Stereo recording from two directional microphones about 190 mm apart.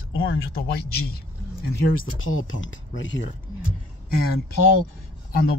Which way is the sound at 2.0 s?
90° left.